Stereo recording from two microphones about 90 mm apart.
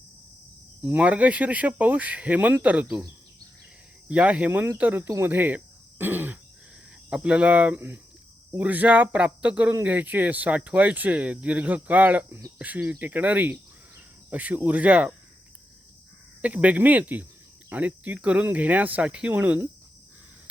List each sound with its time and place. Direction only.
0.8 s speech: 15° right (ahead or behind)
4.1 s speech: 15° right (ahead or behind)
5.0 s speech: 30° right (ahead or behind)
5.3 s speech: 20° right (ahead or behind)
16.4 s speech: 15° right (ahead or behind)